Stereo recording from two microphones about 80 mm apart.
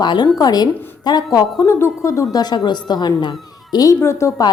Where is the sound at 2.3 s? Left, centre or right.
Left.